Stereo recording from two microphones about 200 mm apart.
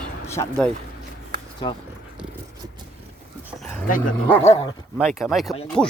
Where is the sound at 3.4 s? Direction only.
5° right (ahead or behind).